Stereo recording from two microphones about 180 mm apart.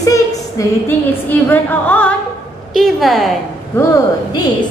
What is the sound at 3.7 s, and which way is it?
Speech, 15° left (ahead or behind).